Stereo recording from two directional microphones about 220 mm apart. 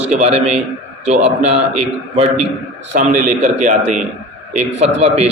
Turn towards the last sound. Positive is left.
turn(degrees=-30)  # may be behind; listen again after turning